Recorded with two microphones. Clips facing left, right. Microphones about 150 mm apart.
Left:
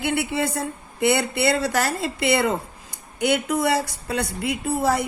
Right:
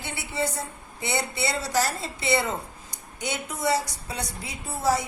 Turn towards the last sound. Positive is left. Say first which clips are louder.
# left 4 dB
turn(degrees=60)  # may be behind; listen again after turning